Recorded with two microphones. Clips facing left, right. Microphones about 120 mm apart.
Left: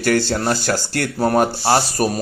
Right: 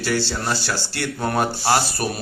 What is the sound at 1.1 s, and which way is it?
Speech, 35° left (ahead or behind).